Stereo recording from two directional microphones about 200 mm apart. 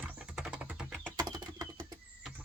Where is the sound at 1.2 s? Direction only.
20° right (ahead or behind).